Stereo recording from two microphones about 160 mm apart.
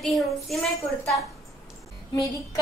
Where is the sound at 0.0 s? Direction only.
Centre (ahead or behind).